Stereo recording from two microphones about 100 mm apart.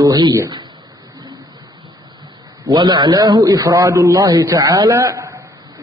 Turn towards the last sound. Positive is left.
turn(degrees=-25)  # may be behind; listen again after turning